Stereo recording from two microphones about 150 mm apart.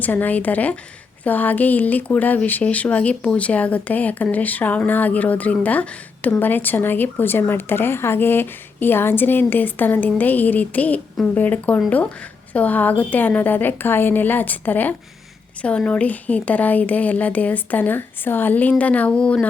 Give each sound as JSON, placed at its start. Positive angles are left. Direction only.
{"t": 0.0, "sound": "speech", "side_deg": 10}